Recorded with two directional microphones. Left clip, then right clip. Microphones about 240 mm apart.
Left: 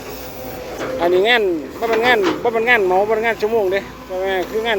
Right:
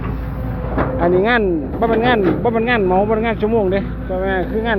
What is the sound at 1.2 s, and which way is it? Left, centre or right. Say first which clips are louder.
Speech: left 1 dB; left.